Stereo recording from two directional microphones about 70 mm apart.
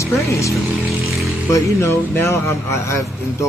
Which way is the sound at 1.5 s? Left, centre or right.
Left.